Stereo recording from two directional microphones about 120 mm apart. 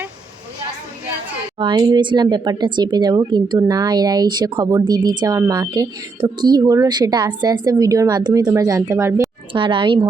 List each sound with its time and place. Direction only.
1.5 s a woman's voice: 45° right (ahead or behind); by 9.2 s 25° right (ahead or behind)
9.5 s speech: 45° right (ahead or behind)